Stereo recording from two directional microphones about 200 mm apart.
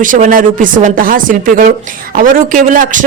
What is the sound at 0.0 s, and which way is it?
A man's voice, 40° right (ahead or behind).